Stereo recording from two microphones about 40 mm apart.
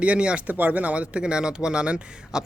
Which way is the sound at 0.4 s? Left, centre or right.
Right.